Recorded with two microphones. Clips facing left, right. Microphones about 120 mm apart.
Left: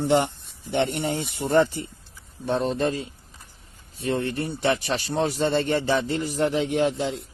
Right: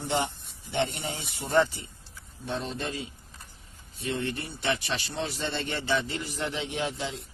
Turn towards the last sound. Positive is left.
turn(degrees=45)  # may be behind; listen again after turning